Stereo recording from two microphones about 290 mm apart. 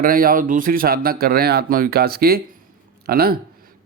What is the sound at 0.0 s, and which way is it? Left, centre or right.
Speech, right.